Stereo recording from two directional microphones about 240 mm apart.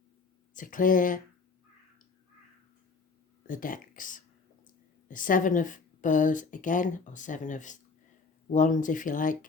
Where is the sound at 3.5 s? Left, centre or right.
Left.